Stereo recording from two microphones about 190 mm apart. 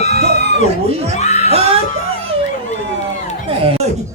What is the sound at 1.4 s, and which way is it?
Speech, 30° right (ahead or behind).